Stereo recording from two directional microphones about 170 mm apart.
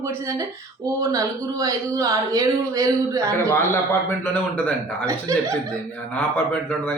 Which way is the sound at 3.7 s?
15° left (ahead or behind).